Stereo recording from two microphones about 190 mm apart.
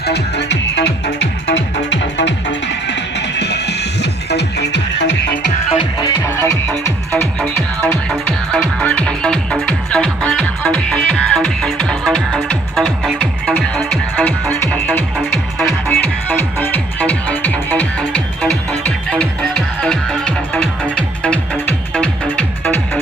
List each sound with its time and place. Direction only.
0.0 s music: 60° left (ahead or behind)
5.7 s music: 25° left (ahead or behind); by 22.8 s 5° left (ahead or behind)